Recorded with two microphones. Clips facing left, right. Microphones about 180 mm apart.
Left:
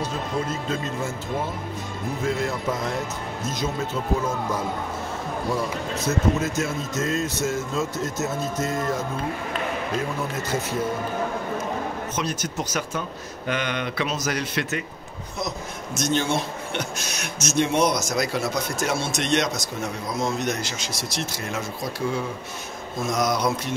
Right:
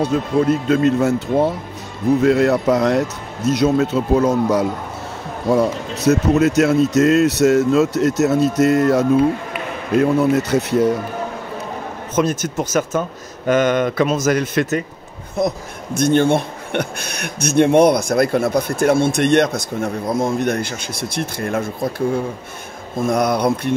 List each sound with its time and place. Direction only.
0.0 s speech: 65° right (ahead or behind)
12.2 s speech: 50° right (ahead or behind)